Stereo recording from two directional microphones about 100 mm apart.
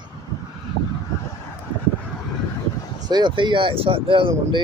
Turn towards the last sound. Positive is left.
turn(degrees=-60)  # may be behind; listen again after turning